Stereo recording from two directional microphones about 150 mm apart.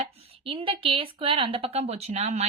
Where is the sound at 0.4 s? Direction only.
35° right (ahead or behind).